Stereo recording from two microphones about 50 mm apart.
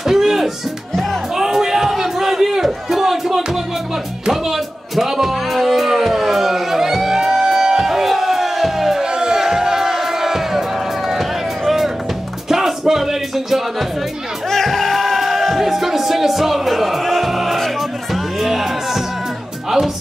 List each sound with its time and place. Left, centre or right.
0.0 s music: centre
1.3 s crowd: centre
4.3 s music: centre
11.1 s a sound: centre
12.4 s music: centre
14.5 s music: centre